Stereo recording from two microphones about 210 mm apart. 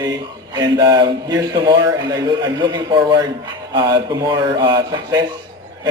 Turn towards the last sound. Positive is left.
turn(degrees=-20)  # may be behind; listen again after turning